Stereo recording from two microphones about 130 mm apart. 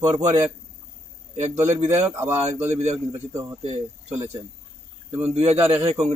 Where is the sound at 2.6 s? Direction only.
55° right (ahead or behind).